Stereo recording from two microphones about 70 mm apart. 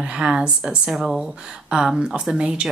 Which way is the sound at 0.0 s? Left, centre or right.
Centre.